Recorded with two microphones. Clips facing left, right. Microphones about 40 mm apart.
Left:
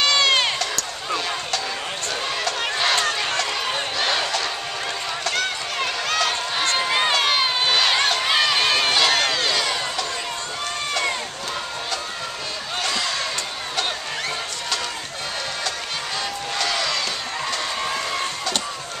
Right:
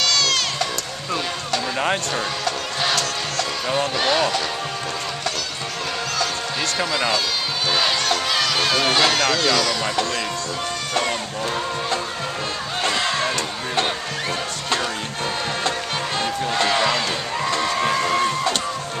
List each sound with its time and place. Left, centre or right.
0.0 s crowd: left
3.0 s music: left
4.0 s music: centre
6.1 s run: left
7.9 s run: left
8.5 s a sound: centre
12.8 s a sound: right
16.2 s music: right